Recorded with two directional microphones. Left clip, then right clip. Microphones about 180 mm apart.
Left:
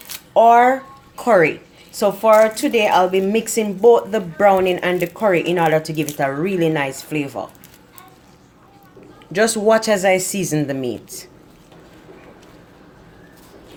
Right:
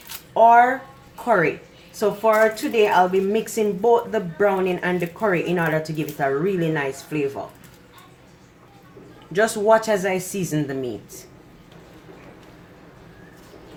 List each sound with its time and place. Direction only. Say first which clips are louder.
0.3 s a woman's voice: left 3 dB; 55° left (ahead or behind)
9.3 s speech: left 2 dB; 45° left (ahead or behind)